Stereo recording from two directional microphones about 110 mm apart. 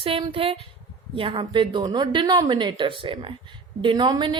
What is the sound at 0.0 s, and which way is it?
A woman's voice, 55° right (ahead or behind).